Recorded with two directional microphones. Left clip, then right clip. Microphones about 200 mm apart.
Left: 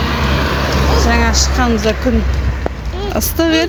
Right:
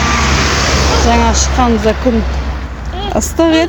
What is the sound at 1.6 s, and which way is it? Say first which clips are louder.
Speech: right 5 dB; 5° right (ahead or behind).